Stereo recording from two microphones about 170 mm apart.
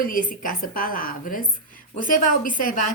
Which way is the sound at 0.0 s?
55° left (ahead or behind).